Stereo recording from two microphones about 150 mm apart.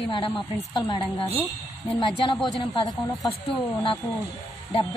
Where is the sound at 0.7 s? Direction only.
25° left (ahead or behind).